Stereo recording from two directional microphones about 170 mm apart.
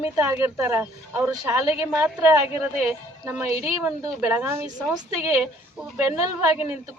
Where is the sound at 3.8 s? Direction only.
15° right (ahead or behind).